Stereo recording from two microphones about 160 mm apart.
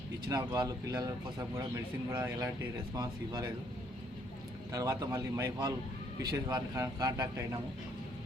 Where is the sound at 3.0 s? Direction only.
25° right (ahead or behind).